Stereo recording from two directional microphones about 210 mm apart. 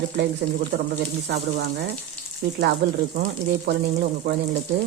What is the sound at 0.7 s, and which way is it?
Speech, 60° right (ahead or behind).